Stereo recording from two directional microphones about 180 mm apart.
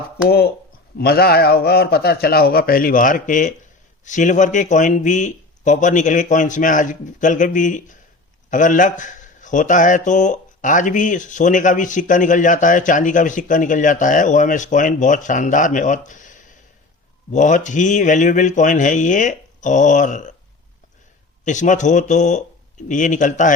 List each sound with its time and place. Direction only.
0.3 s a man's voice: 60° left (ahead or behind); by 20.3 s 45° left (ahead or behind)
21.4 s a man's voice: 45° left (ahead or behind)